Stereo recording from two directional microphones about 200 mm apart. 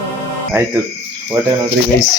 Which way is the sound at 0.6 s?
15° right (ahead or behind).